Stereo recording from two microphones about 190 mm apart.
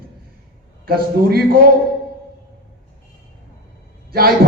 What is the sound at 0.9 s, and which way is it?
Speech, 55° right (ahead or behind).